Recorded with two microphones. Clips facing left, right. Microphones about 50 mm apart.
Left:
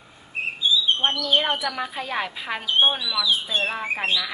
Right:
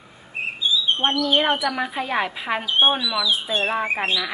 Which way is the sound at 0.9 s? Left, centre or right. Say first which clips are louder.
Right 2 dB; right.